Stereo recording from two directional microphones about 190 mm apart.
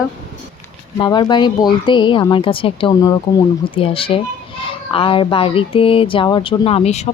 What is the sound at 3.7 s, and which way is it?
Speech, 30° left (ahead or behind).